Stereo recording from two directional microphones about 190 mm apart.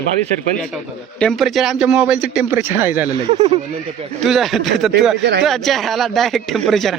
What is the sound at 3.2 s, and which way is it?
Speech, 30° right (ahead or behind).